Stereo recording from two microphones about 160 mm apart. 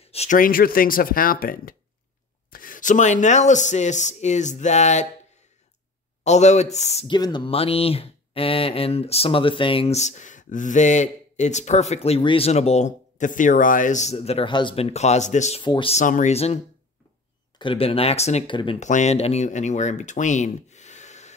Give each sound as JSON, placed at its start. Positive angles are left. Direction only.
{"t": 0.0, "sound": "a sound", "side_deg": 40}
{"t": 0.4, "sound": "speech", "side_deg": 65}
{"t": 6.2, "sound": "speech", "side_deg": 45}
{"t": 7.1, "sound": "speech", "side_deg": 25}
{"t": 15.6, "sound": "speech", "side_deg": 30}
{"t": 15.9, "sound": "speech", "side_deg": 50}
{"t": 17.6, "sound": "speech", "side_deg": 35}